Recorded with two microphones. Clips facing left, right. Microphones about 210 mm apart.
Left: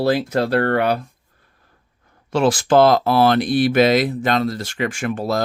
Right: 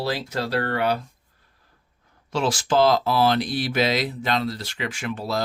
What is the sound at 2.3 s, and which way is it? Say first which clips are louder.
Speech: left 7 dB; 55° left (ahead or behind).